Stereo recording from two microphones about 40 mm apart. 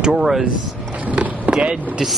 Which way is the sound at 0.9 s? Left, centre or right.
Right.